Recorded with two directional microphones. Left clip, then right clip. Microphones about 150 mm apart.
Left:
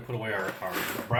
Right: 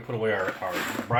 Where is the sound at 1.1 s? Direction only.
60° right (ahead or behind).